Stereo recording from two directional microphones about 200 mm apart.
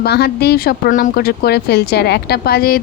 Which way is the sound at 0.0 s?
55° left (ahead or behind).